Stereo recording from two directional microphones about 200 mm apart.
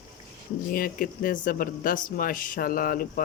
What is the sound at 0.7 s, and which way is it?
Speech, 45° left (ahead or behind).